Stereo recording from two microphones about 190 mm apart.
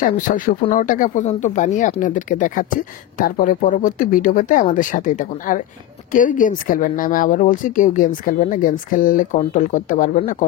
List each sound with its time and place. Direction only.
0.0 s speech: 45° left (ahead or behind)